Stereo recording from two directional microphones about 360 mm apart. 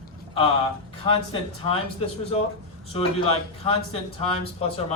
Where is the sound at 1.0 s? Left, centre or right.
Centre.